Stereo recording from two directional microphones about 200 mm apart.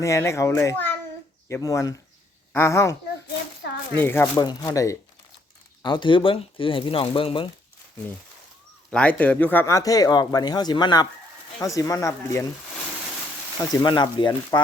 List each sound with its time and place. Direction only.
0.0 s speech: 15° left (ahead or behind)
3.9 s speech: 10° left (ahead or behind); by 7.5 s 25° left (ahead or behind)
8.9 s speech: 5° left (ahead or behind)
13.8 s speech: 20° left (ahead or behind)